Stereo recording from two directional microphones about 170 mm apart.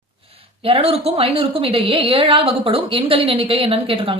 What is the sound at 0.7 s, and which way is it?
A woman's voice, 35° right (ahead or behind).